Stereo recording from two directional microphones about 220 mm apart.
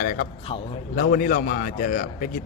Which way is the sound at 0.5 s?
30° left (ahead or behind).